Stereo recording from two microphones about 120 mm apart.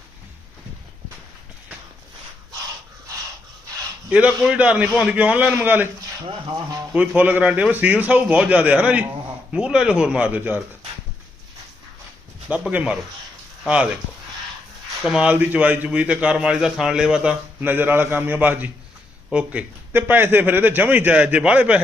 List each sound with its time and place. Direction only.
4.1 s speech: 10° right (ahead or behind)
6.2 s speech: 45° right (ahead or behind)
6.9 s speech: 10° right (ahead or behind)
12.5 s speech: 10° right (ahead or behind)
15.0 s speech: 10° right (ahead or behind)